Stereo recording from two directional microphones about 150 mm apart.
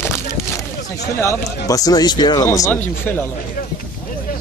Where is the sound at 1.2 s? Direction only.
20° left (ahead or behind).